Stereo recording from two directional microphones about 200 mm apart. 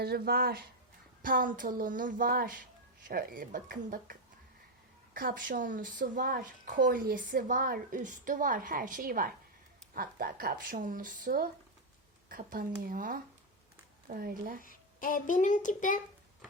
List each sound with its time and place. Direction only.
0.0 s a woman's voice: 50° right (ahead or behind)
14.6 s speech: 45° left (ahead or behind)